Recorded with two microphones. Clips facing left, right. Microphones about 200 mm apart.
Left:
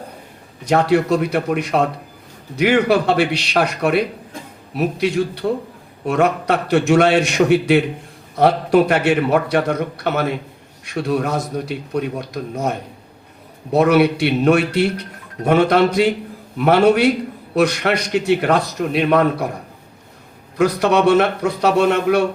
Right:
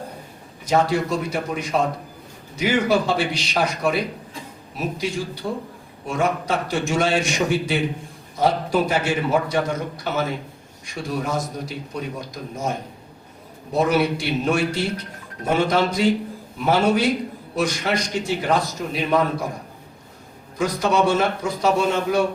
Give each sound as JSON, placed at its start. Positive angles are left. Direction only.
{"t": 0.6, "sound": "a man's voice", "side_deg": 65}
{"t": 13.7, "sound": "a man's voice", "side_deg": 65}
{"t": 20.6, "sound": "a man's voice", "side_deg": 65}